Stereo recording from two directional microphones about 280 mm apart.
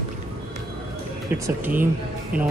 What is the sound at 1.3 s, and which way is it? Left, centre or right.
Speech, centre.